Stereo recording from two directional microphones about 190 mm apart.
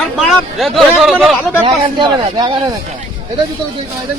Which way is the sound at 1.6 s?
25° right (ahead or behind).